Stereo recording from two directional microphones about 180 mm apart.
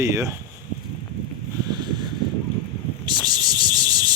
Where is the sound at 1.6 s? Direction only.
25° right (ahead or behind).